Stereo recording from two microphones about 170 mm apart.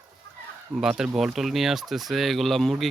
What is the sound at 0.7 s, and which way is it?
Speech, centre (ahead or behind).